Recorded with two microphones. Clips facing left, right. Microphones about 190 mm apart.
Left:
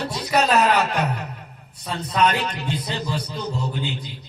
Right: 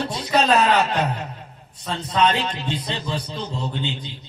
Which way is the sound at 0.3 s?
25° right (ahead or behind).